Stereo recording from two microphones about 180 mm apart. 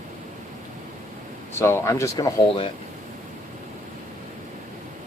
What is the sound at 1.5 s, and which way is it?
Speech, 15° left (ahead or behind).